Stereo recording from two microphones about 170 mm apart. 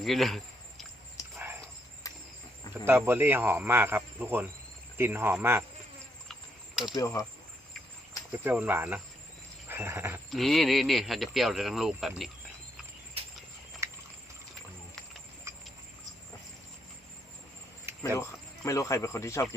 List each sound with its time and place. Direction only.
0.0 s speech: centre (ahead or behind)
2.8 s speech: 15° right (ahead or behind)
6.8 s speech: 20° left (ahead or behind)
8.4 s speech: 10° right (ahead or behind)
9.6 s a sound: 15° right (ahead or behind)
10.2 s speech: centre (ahead or behind)
13.8 s a sound: 15° right (ahead or behind)
15.5 s a sound: 15° right (ahead or behind)
18.2 s speech: 20° left (ahead or behind)